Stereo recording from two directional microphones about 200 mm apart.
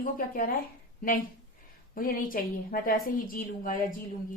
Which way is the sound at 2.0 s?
45° left (ahead or behind).